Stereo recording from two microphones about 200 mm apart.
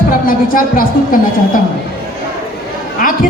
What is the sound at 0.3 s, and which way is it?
Speech, 45° left (ahead or behind).